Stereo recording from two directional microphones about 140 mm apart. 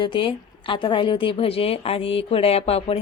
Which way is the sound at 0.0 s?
35° left (ahead or behind).